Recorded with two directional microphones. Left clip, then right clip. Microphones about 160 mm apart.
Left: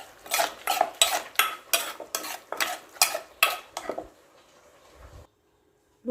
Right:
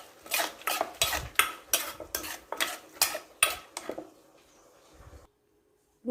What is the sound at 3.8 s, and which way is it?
Dishes, 10° left (ahead or behind).